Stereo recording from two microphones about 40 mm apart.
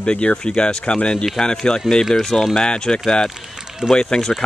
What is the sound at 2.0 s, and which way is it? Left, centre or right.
Speech, centre.